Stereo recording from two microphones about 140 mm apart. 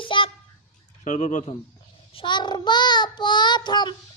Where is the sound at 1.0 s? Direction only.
60° left (ahead or behind).